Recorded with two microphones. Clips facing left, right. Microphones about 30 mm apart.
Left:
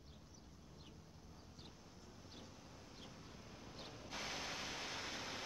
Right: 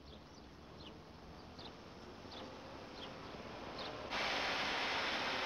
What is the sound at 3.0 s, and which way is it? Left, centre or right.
Vehicle, right.